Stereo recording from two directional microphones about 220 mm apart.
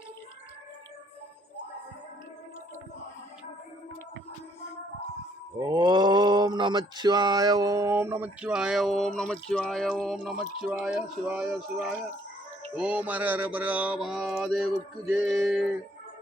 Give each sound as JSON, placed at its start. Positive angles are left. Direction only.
{"t": 5.5, "sound": "mantra", "side_deg": -20}
{"t": 10.0, "sound": "music", "side_deg": 0}